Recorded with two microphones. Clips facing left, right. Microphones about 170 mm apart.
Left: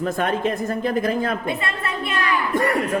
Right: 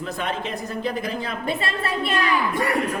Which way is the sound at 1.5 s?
30° right (ahead or behind).